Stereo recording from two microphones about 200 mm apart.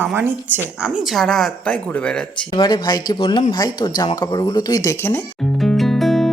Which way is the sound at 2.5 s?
20° left (ahead or behind).